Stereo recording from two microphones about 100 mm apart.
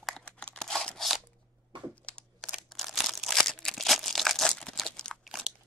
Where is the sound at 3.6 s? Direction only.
Centre (ahead or behind).